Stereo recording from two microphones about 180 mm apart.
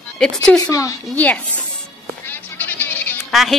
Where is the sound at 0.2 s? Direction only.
5° left (ahead or behind).